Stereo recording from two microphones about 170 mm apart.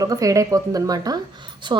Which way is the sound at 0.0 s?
20° right (ahead or behind).